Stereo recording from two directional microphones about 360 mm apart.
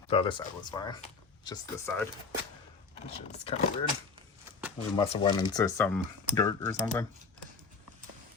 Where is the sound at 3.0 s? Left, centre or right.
Centre.